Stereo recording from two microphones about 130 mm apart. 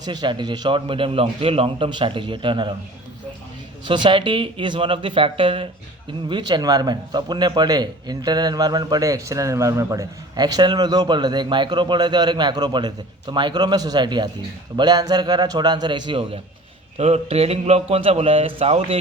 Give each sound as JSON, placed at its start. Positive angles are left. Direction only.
{"t": 0.0, "sound": "a man's voice", "side_deg": -30}
{"t": 3.8, "sound": "a man's voice", "side_deg": -35}
{"t": 17.0, "sound": "a man's voice", "side_deg": -55}